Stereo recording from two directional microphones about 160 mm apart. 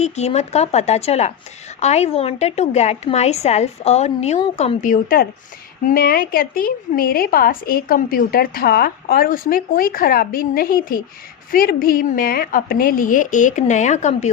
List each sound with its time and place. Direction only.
0.0 s a woman's voice: 45° left (ahead or behind)